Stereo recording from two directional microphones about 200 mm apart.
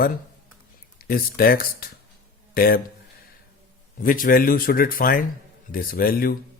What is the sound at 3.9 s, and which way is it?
Speech, 45° left (ahead or behind).